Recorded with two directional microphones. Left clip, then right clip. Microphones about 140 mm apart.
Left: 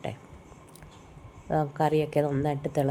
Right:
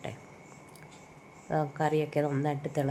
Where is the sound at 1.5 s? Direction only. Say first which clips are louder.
Left 3 dB; 20° left (ahead or behind).